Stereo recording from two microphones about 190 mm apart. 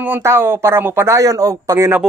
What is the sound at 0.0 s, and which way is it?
Speech, 10° right (ahead or behind).